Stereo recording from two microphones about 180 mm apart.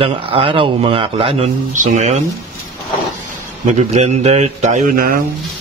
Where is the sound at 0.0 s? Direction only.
30° right (ahead or behind).